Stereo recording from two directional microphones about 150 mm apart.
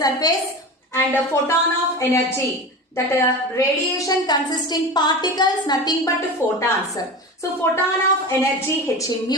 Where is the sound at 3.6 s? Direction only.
20° left (ahead or behind).